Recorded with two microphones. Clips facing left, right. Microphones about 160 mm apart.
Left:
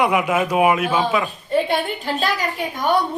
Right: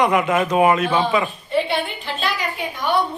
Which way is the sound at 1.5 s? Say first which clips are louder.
Left 2 dB; 45° left (ahead or behind).